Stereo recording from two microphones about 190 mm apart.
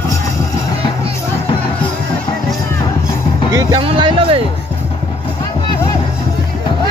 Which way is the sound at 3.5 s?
20° right (ahead or behind).